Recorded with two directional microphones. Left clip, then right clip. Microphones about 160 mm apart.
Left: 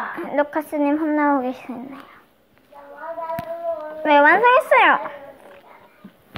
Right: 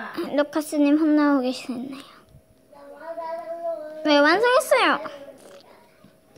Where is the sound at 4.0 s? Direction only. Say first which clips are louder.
Left 4 dB; 55° right (ahead or behind).